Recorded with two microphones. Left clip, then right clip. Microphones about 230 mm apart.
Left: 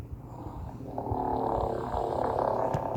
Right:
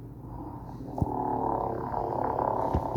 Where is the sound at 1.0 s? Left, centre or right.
Left.